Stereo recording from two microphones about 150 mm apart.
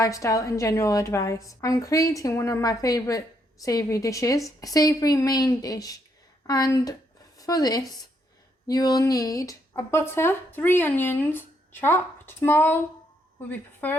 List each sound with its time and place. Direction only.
0.0 s a woman's voice: 20° left (ahead or behind)
13.8 s speech: 10° left (ahead or behind)